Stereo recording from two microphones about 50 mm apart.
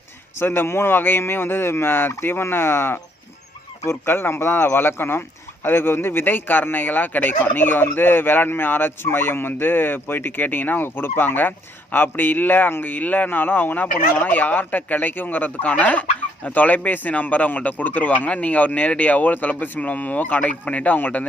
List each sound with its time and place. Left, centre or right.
0.3 s speech: left